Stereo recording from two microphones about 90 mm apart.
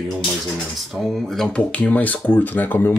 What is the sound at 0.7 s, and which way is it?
Speech, centre (ahead or behind).